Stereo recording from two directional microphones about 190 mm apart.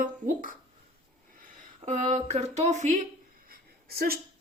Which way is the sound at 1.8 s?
40° right (ahead or behind).